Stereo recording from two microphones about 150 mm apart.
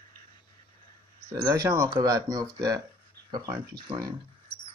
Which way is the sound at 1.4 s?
20° right (ahead or behind).